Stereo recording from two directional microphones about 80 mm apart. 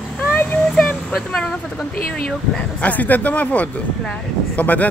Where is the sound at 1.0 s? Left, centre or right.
Centre.